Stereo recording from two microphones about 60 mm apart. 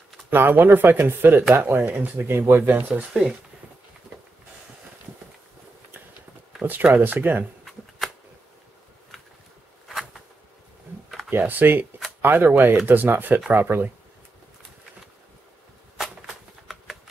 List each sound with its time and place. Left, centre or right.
0.3 s speech: right
3.1 s speech: centre
6.6 s speech: right
9.8 s a sound: centre
11.4 s speech: right
16.3 s a sound: centre